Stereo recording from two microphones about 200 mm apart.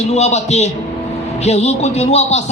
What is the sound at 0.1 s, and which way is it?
A man's voice, 35° left (ahead or behind).